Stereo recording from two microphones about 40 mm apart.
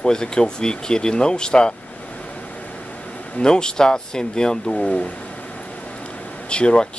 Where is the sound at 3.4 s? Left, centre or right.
Left.